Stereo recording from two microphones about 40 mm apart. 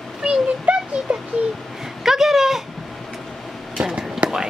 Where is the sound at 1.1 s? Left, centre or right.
Centre.